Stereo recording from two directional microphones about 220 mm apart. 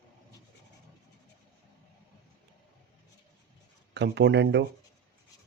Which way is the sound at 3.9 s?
50° right (ahead or behind).